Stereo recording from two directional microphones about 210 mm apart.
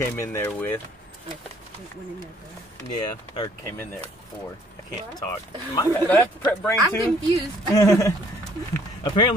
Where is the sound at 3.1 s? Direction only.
20° left (ahead or behind).